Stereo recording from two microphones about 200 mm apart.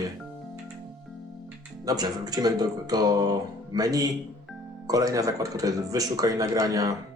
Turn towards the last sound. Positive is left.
turn(degrees=-15)  # may be behind; listen again after turning